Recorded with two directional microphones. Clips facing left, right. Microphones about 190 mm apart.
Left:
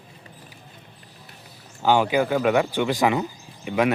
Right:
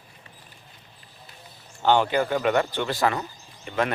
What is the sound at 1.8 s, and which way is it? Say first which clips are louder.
Speech: left 1 dB; 10° left (ahead or behind).